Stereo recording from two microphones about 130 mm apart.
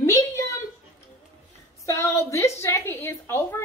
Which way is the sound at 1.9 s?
20° left (ahead or behind).